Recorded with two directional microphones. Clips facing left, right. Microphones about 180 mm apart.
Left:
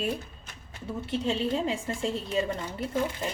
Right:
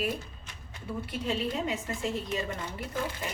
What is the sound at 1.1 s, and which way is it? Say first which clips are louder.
A woman's voice: left 5 dB; 30° left (ahead or behind).